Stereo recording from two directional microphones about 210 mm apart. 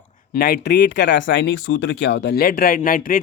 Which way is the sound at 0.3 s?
45° left (ahead or behind).